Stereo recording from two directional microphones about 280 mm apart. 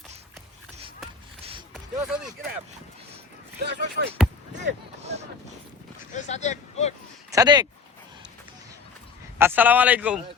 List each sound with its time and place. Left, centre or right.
1.7 s a sound: centre
3.6 s speech: right
6.1 s speech: left
7.3 s speech: centre
9.4 s speech: centre